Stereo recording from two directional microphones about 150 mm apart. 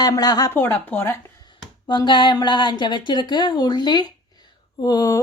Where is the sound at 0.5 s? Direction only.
15° left (ahead or behind).